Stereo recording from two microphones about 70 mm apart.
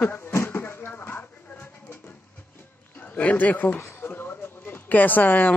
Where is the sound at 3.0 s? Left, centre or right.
Left.